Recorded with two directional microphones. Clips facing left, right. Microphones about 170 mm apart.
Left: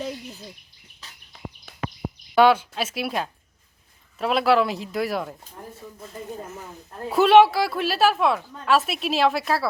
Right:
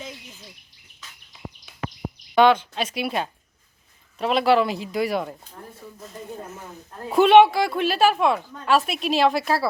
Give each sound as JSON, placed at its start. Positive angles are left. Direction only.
{"t": 0.1, "sound": "a sound", "side_deg": 35}
{"t": 2.3, "sound": "a woman's voice", "side_deg": 5}
{"t": 7.1, "sound": "a woman's voice", "side_deg": 0}